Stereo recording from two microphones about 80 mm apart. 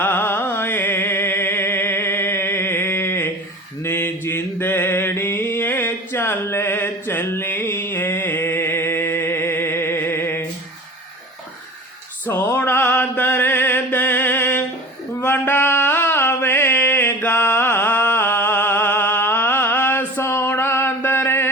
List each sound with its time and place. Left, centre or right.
0.0 s music: left
3.8 s mantra: left
12.3 s music: left
15.2 s mantra: left